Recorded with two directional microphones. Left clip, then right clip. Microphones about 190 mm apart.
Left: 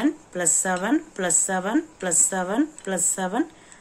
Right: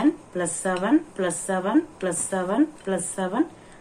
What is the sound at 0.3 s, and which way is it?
A woman's voice, 70° left (ahead or behind).